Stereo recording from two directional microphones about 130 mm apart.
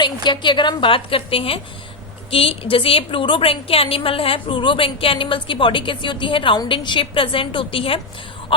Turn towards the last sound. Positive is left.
turn(degrees=45)  # may be behind; listen again after turning